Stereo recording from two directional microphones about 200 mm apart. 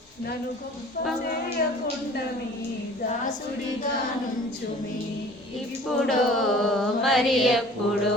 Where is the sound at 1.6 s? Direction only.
50° left (ahead or behind).